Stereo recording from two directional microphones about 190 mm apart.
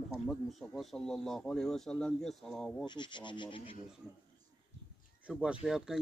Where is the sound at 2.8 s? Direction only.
25° left (ahead or behind).